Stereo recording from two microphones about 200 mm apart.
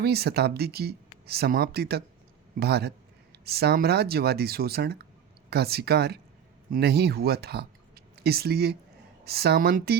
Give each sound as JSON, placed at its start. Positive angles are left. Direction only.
{"t": 0.0, "sound": "speech", "side_deg": -55}